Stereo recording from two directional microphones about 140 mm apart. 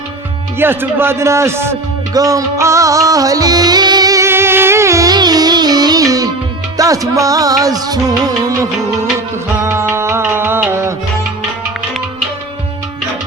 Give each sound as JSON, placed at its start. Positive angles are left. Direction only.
{"t": 0.6, "sound": "music", "side_deg": -15}